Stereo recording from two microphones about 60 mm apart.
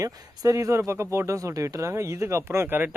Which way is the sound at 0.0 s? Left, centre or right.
Right.